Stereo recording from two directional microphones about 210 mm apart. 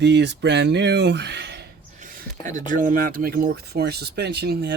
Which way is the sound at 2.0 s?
40° right (ahead or behind).